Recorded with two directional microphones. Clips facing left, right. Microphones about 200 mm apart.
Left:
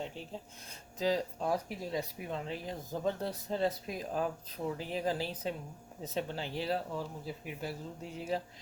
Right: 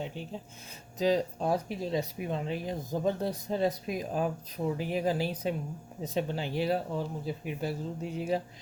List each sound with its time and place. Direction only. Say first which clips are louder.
0.0 s speech: right 3 dB; centre (ahead or behind)
0.9 s speech: right 5 dB; 20° right (ahead or behind)